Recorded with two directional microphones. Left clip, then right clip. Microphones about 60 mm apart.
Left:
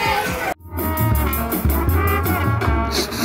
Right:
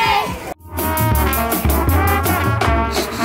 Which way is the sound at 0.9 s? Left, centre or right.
Centre.